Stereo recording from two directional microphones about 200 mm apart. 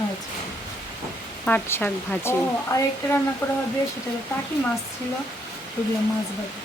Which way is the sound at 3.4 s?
10° left (ahead or behind).